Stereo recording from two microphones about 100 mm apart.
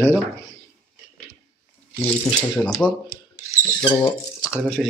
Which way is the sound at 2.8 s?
10° left (ahead or behind).